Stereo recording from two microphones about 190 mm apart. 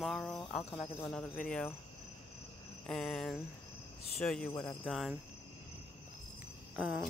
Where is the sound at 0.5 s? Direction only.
30° left (ahead or behind).